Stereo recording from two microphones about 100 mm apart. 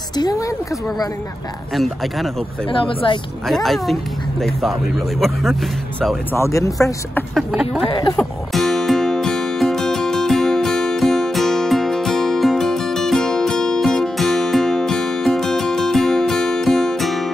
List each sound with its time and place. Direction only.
0.1 s a woman's voice: 40° left (ahead or behind)
2.7 s speech: 60° left (ahead or behind)
3.4 s speech: centre (ahead or behind)
6.3 s speech: 30° left (ahead or behind)
7.3 s speech: centre (ahead or behind)
7.9 s speech: 50° left (ahead or behind)
8.2 s music: centre (ahead or behind)